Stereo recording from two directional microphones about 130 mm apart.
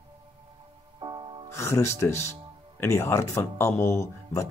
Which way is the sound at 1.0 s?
35° right (ahead or behind).